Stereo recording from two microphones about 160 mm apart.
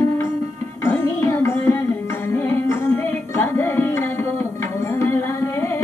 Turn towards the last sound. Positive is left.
turn(degrees=15)  # may be behind; listen again after turning